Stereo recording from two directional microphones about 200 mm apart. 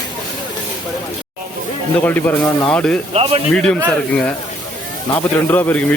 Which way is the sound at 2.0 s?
10° left (ahead or behind).